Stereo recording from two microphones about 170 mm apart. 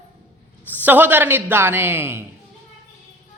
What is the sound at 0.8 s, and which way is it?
A woman's voice, 10° right (ahead or behind).